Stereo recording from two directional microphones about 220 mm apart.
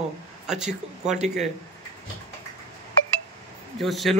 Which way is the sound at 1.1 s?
30° right (ahead or behind).